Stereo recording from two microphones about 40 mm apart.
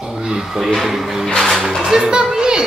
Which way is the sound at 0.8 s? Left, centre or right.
Centre.